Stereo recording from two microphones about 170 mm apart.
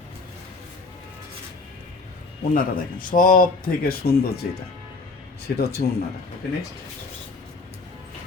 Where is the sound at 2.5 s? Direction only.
55° left (ahead or behind).